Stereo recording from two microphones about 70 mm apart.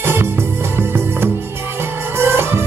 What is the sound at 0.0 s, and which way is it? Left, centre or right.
Music, right.